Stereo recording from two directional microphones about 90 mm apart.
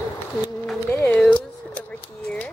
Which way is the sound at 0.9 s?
25° left (ahead or behind).